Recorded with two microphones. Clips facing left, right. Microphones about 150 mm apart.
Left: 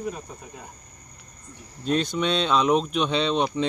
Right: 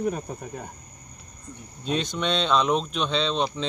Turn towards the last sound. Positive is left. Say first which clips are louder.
# left 2 dB
turn(degrees=10)  # may be behind; listen again after turning